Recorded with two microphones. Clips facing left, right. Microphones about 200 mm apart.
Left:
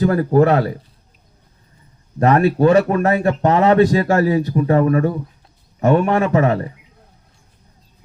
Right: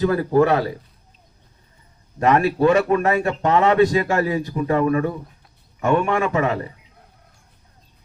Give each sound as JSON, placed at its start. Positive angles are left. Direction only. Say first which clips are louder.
{"t": 0.0, "sound": "speech", "louder": "left 3 dB", "side_deg": 40}
{"t": 2.1, "sound": "speech", "louder": "left 3 dB", "side_deg": 35}